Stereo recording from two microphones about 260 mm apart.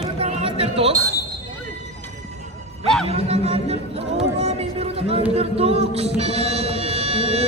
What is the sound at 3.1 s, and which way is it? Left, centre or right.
Speech, right.